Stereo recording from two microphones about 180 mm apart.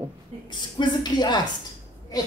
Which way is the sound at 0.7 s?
25° left (ahead or behind).